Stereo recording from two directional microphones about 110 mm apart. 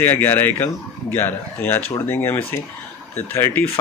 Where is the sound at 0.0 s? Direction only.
20° left (ahead or behind).